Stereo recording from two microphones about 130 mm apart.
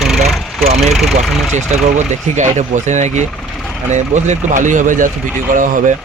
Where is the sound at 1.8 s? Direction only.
70° right (ahead or behind); by 5.9 s 85° right.